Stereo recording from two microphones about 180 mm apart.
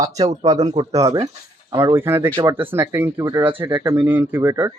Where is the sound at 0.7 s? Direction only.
20° right (ahead or behind).